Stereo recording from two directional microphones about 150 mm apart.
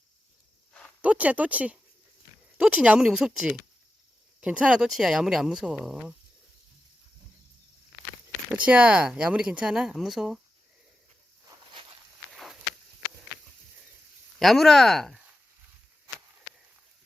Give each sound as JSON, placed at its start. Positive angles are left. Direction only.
{"t": 1.0, "sound": "speech", "side_deg": -10}
{"t": 8.6, "sound": "speech", "side_deg": -5}
{"t": 11.7, "sound": "walk", "side_deg": -35}
{"t": 12.3, "sound": "walk", "side_deg": 0}
{"t": 14.3, "sound": "speech", "side_deg": 0}